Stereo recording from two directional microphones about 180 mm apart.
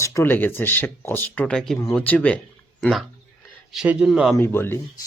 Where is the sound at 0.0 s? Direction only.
15° left (ahead or behind).